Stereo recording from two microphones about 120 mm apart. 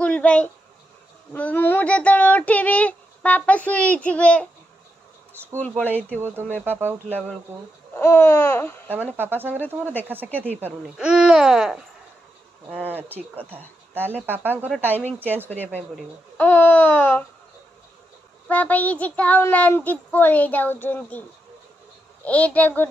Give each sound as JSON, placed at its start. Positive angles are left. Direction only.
{"t": 0.0, "sound": "a sound", "side_deg": 10}
{"t": 1.3, "sound": "speech", "side_deg": 15}
{"t": 5.6, "sound": "speech", "side_deg": 15}
{"t": 6.1, "sound": "speech", "side_deg": -15}
{"t": 7.9, "sound": "speech", "side_deg": 20}
{"t": 9.0, "sound": "speech", "side_deg": -20}
{"t": 12.6, "sound": "speech", "side_deg": -15}
{"t": 16.3, "sound": "speech", "side_deg": 20}
{"t": 18.5, "sound": "speech", "side_deg": 10}
{"t": 22.2, "sound": "speech", "side_deg": 15}